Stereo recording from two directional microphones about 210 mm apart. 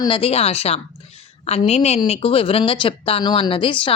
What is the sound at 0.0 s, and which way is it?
A woman's voice, 25° left (ahead or behind).